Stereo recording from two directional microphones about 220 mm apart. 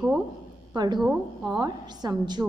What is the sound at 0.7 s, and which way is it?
Speech, 20° right (ahead or behind).